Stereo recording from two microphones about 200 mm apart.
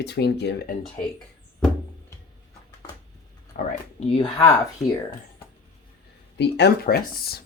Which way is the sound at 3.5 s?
30° left (ahead or behind).